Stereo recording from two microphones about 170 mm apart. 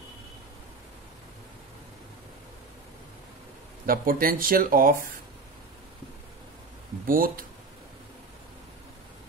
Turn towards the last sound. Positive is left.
turn(degrees=-55)  # may be behind; listen again after turning